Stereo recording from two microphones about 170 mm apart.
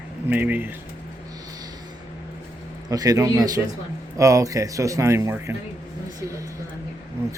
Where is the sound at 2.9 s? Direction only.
20° right (ahead or behind).